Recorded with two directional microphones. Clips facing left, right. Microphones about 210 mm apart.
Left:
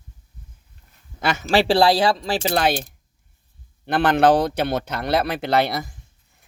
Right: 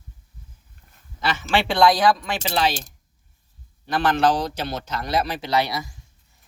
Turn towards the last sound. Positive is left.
turn(degrees=55)  # may be behind; listen again after turning